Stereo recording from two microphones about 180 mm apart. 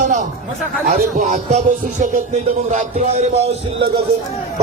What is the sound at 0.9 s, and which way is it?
Speech, 45° right (ahead or behind).